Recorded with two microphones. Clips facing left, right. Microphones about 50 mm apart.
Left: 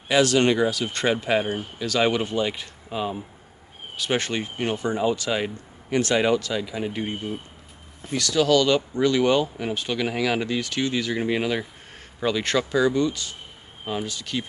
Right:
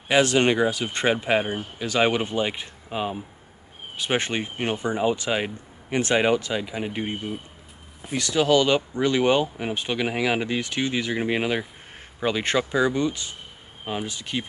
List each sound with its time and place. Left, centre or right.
0.1 s speech: right